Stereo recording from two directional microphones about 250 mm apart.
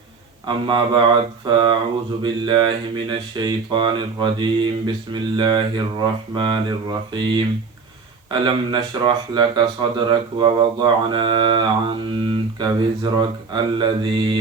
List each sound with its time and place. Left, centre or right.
0.4 s mantra: centre
2.2 s speech: centre
6.3 s mantra: centre
8.3 s speech: centre
9.9 s mantra: centre